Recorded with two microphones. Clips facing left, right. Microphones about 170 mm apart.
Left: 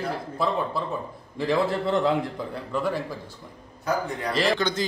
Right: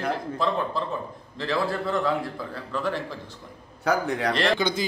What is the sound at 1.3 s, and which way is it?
Speech, 15° left (ahead or behind).